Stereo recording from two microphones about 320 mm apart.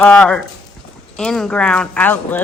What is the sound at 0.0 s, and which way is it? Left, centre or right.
Speech, centre.